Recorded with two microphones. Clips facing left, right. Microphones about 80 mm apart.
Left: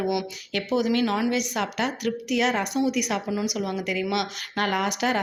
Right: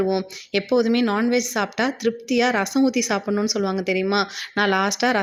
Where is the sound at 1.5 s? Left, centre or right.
Right.